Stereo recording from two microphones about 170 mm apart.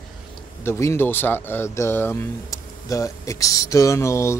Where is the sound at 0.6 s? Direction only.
15° left (ahead or behind).